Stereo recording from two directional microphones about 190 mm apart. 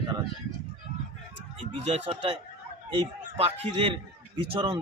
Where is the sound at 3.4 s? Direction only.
30° right (ahead or behind).